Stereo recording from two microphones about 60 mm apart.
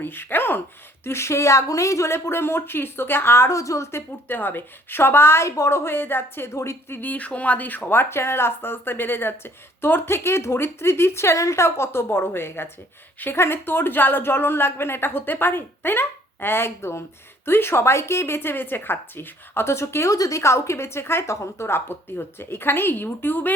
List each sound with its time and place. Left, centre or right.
0.0 s a woman's voice: left
1.0 s a woman's voice: left
4.3 s a woman's voice: left
20.1 s a woman's voice: left